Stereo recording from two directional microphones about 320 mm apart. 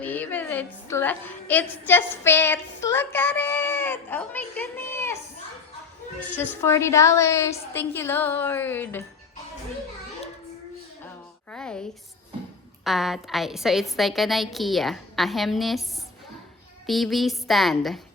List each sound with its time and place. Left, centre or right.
0.0 s a woman's voice: centre
6.1 s a woman's voice: centre
11.5 s a sound: centre
12.8 s a woman's voice: centre
16.8 s a woman's voice: centre